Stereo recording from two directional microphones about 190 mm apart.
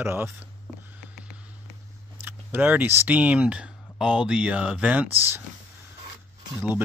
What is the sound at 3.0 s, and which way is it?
Speech, 10° right (ahead or behind).